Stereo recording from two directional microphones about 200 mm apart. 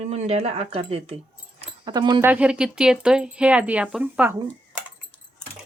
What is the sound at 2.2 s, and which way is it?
Speech, 5° right (ahead or behind).